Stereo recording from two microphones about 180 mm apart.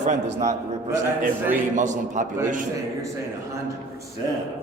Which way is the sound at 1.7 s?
45° right (ahead or behind).